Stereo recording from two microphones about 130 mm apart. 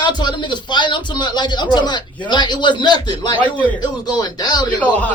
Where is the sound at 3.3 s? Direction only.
10° left (ahead or behind).